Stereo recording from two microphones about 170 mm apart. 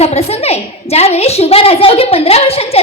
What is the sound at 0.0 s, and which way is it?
A woman's voice, 40° left (ahead or behind).